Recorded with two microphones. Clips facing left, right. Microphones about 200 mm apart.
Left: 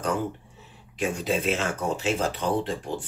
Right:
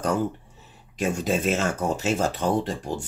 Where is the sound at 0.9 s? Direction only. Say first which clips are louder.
Right 2 dB; 45° right (ahead or behind).